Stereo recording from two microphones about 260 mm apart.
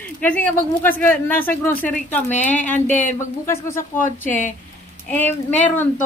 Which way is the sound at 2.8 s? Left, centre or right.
Left.